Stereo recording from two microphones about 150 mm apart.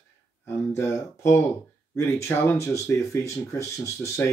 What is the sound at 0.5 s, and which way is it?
Speech, 20° left (ahead or behind).